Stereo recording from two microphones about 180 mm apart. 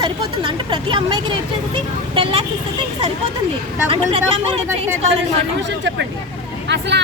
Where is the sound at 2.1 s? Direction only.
30° right (ahead or behind).